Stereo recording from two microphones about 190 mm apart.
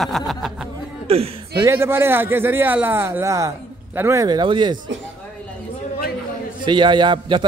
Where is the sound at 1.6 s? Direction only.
15° right (ahead or behind).